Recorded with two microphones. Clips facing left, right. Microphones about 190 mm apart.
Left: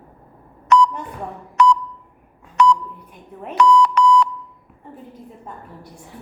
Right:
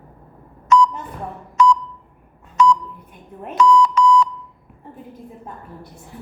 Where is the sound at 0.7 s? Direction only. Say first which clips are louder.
Even; 65° left (ahead or behind).